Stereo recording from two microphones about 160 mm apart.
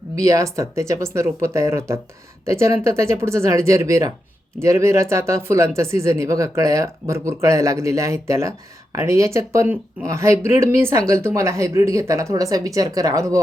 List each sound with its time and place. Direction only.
0.2 s speech: 20° right (ahead or behind)